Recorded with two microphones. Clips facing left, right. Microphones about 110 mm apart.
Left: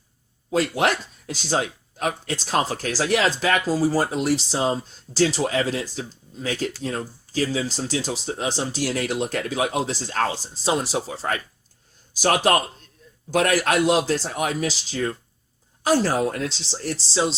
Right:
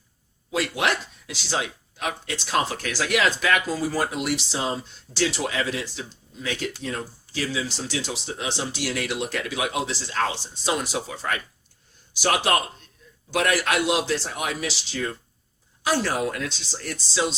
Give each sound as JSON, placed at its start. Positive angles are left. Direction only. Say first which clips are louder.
{"t": 0.5, "sound": "speech", "louder": "left 3 dB", "side_deg": 40}